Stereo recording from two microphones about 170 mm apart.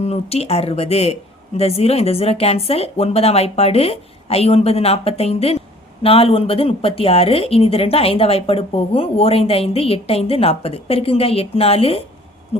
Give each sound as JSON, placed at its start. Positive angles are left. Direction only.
{"t": 0.0, "sound": "a woman's voice", "side_deg": 40}